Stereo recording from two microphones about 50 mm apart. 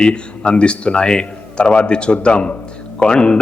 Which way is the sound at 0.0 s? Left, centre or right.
Centre.